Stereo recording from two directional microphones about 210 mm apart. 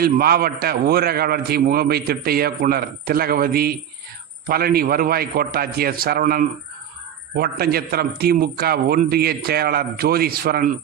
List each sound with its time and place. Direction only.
0.0 s a man's voice: 45° right (ahead or behind)